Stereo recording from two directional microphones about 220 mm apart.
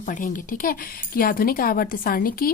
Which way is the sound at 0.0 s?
35° left (ahead or behind).